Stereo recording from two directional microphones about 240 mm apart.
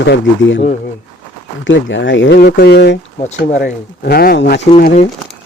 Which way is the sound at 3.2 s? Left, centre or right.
Left.